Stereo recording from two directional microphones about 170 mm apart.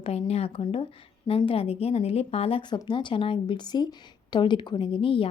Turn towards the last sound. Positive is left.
turn(degrees=30)  # may be behind; listen again after turning